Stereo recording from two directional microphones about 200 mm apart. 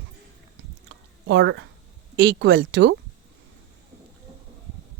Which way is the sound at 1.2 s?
60° right (ahead or behind).